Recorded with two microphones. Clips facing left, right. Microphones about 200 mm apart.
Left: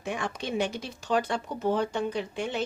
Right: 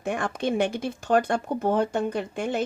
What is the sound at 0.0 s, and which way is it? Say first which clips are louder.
Speech: right 6 dB; 50° right (ahead or behind).